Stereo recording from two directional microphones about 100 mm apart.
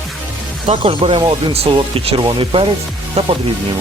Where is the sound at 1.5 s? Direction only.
90° right.